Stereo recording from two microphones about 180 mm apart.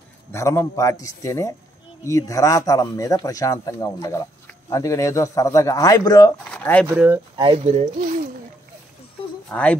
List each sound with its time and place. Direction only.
0.3 s speech: 15° left (ahead or behind)
6.5 s speech: 5° left (ahead or behind)
6.9 s speech: 15° right (ahead or behind)
7.3 s speech: 30° right (ahead or behind)
9.5 s speech: 5° left (ahead or behind)